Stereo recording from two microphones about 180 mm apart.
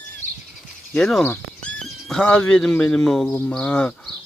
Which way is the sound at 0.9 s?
5° left (ahead or behind).